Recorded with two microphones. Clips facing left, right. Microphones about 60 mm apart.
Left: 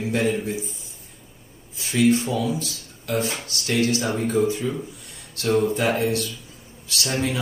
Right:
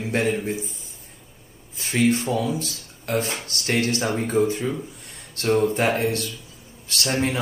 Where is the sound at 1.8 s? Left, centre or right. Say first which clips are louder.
Left 2 dB; right.